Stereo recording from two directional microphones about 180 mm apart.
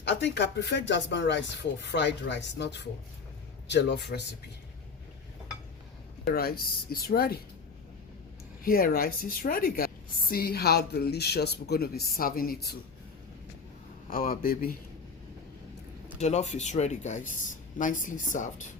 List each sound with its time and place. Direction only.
0.0 s speech: 75° left (ahead or behind)
6.3 s a woman's voice: 55° left (ahead or behind)
8.6 s a woman's voice: 55° left (ahead or behind)
14.1 s a man's voice: 50° left (ahead or behind)
16.1 s a man's voice: 40° left (ahead or behind)